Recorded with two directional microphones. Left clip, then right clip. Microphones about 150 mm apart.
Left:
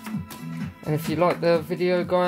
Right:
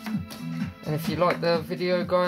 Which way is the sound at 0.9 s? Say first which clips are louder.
Left 2 dB; 35° left (ahead or behind).